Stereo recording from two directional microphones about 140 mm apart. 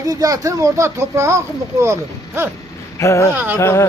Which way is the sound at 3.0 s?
20° left (ahead or behind).